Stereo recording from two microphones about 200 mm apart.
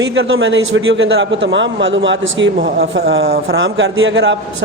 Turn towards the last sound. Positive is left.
turn(degrees=-65)  # may be behind; listen again after turning